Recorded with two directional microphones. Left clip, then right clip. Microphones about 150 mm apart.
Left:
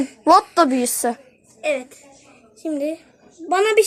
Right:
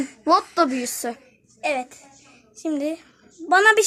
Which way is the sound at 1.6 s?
40° right (ahead or behind).